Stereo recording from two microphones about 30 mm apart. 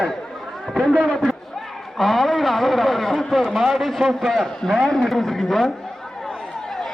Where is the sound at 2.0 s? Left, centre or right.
Centre.